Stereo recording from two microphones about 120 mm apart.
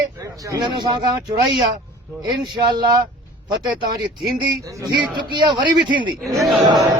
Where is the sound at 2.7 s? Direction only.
35° right (ahead or behind).